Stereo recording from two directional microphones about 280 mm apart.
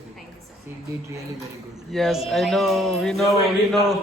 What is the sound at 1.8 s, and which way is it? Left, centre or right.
Speech, centre.